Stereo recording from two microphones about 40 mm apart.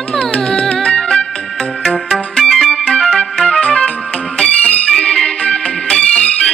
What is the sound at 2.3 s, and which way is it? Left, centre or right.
Music, centre.